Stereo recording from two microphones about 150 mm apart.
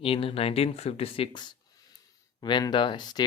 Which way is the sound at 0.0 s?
40° left (ahead or behind).